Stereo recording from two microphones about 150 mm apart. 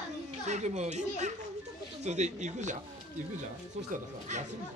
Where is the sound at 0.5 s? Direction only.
50° right (ahead or behind).